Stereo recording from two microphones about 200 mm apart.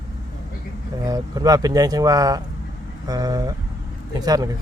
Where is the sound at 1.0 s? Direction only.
20° right (ahead or behind).